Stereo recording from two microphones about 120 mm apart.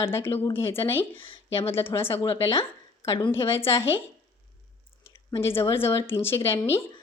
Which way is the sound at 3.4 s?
20° left (ahead or behind).